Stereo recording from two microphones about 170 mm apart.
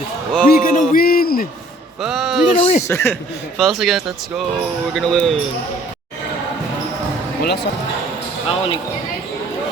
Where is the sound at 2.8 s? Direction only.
15° left (ahead or behind).